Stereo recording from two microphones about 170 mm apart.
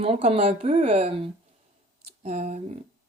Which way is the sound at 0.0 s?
35° right (ahead or behind).